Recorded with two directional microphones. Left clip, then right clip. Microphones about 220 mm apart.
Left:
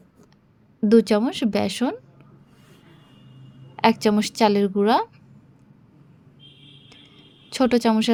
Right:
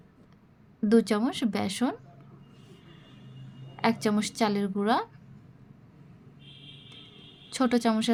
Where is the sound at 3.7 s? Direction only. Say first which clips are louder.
Left 8 dB; 25° left (ahead or behind).